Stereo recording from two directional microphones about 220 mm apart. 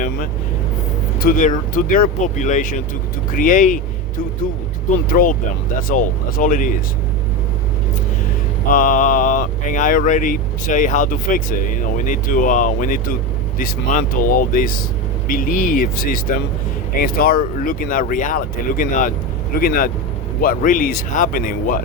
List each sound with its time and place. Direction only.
1.2 s speech: 35° left (ahead or behind)
5.0 s speech: 40° left (ahead or behind)
8.7 s speech: 40° left (ahead or behind)